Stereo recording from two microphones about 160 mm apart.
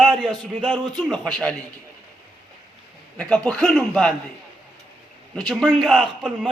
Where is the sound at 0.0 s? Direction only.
Centre (ahead or behind).